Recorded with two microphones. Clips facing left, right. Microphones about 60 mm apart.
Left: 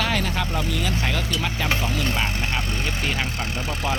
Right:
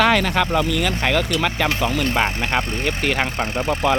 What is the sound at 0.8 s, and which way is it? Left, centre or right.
Speech, right.